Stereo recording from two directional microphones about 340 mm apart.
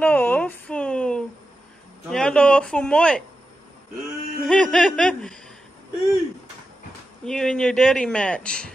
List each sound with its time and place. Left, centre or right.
0.0 s a sound: centre
2.0 s a man's voice: centre
4.4 s a man's voice: centre
7.2 s a man's voice: centre